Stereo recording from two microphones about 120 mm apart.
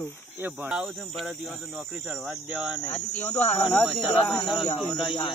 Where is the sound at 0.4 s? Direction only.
15° right (ahead or behind).